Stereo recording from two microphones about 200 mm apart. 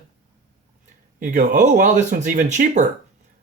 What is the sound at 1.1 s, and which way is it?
Speech, 40° right (ahead or behind).